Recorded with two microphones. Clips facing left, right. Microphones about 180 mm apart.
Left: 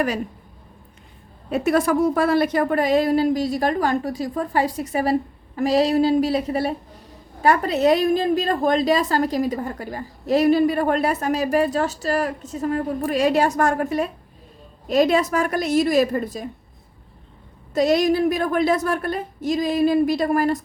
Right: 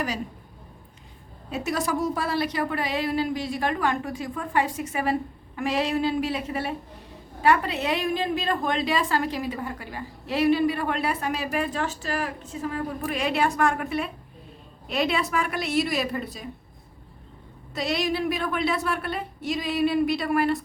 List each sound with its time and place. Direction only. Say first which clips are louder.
1.5 s a woman's voice: left 8 dB; 55° left (ahead or behind)
17.7 s a woman's voice: left 9 dB; 45° left (ahead or behind)